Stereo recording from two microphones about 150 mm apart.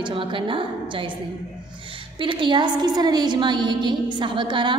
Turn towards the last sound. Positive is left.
turn(degrees=-30)  # may be behind; listen again after turning